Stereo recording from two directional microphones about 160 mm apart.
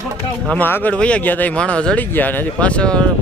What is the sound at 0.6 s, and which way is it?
Speech, 10° left (ahead or behind).